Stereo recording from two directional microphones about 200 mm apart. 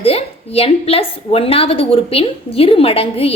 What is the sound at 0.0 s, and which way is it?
A woman's voice, 30° left (ahead or behind).